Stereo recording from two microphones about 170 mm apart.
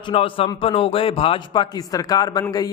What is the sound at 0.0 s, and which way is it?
A man's voice, 30° left (ahead or behind).